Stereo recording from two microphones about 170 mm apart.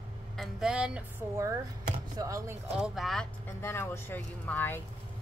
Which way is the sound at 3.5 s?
15° left (ahead or behind).